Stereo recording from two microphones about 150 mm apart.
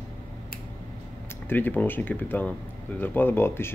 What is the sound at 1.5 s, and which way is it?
Speech, 10° left (ahead or behind).